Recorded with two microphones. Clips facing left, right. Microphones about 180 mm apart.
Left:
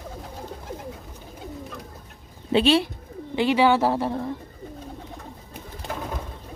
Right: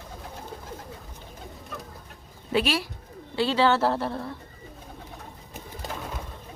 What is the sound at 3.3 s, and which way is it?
A woman's voice, 15° left (ahead or behind).